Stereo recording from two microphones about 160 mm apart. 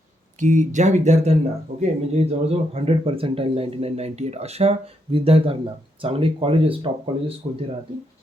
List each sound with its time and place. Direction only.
0.3 s speech: 50° right (ahead or behind); by 7.3 s 35° right (ahead or behind)